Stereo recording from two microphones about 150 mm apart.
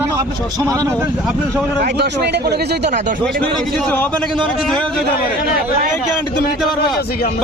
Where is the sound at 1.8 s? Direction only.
90° right.